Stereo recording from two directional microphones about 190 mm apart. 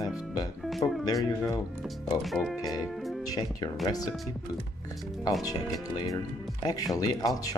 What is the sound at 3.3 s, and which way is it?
Speech, 20° left (ahead or behind).